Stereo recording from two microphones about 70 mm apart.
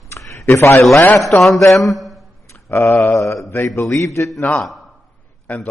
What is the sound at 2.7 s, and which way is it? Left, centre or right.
Mantra, left.